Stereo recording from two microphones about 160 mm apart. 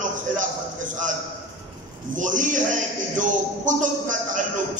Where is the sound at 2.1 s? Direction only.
50° right (ahead or behind).